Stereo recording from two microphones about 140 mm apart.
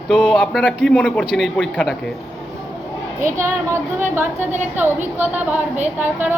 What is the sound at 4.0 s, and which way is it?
A woman's voice, 15° right (ahead or behind).